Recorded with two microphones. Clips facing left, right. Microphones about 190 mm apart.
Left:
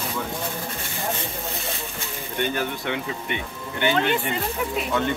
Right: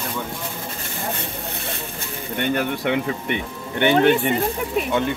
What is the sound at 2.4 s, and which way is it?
Speech, 70° right (ahead or behind).